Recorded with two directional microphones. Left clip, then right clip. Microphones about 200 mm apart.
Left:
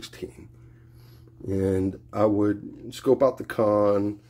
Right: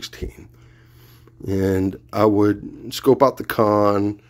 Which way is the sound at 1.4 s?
30° right (ahead or behind).